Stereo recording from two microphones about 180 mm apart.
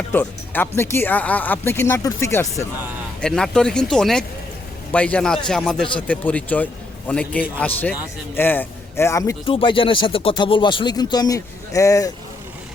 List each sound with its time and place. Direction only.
0.1 s speech: 10° left (ahead or behind)
3.2 s a man's voice: 5° left (ahead or behind)
9.5 s speech: 30° left (ahead or behind)